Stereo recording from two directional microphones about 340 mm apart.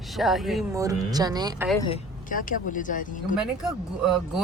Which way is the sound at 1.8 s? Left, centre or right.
Centre.